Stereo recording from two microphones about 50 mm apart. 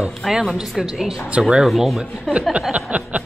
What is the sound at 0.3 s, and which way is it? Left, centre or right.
Speech, centre.